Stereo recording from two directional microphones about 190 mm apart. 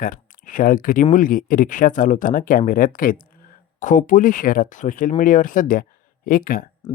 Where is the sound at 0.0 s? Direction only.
45° left (ahead or behind).